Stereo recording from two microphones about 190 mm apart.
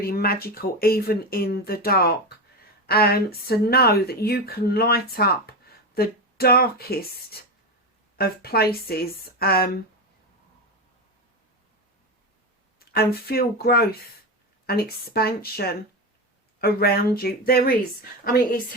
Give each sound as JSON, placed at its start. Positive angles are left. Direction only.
{"t": 0.0, "sound": "speech", "side_deg": 55}
{"t": 12.8, "sound": "speech", "side_deg": 55}